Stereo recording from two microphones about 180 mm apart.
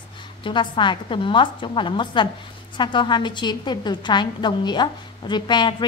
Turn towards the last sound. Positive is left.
turn(degrees=25)  # may be behind; listen again after turning